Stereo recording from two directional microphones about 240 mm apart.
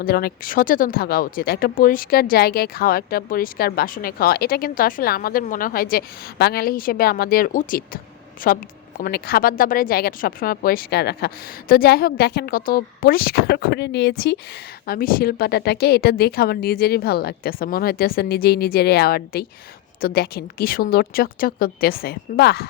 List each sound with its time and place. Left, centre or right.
0.0 s speech: left